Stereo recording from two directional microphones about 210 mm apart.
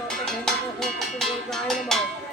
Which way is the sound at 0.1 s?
Centre (ahead or behind).